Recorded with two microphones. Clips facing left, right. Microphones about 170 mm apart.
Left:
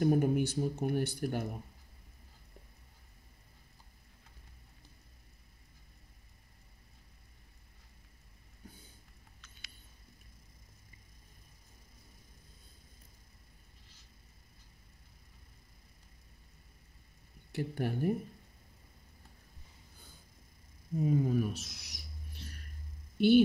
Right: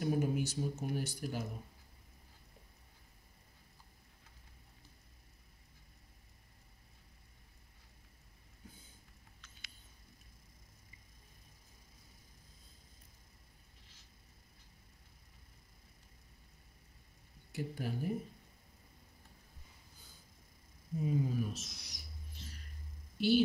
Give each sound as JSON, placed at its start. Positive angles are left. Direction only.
{"t": 0.0, "sound": "speech", "side_deg": 60}
{"t": 17.5, "sound": "speech", "side_deg": 65}
{"t": 21.0, "sound": "bird", "side_deg": 60}
{"t": 23.1, "sound": "a woman's voice", "side_deg": 55}